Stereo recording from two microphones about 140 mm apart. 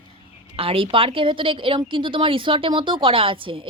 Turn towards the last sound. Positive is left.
turn(degrees=-40)  # may be behind; listen again after turning